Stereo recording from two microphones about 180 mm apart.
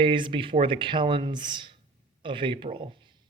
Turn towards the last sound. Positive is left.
turn(degrees=-25)  # may be behind; listen again after turning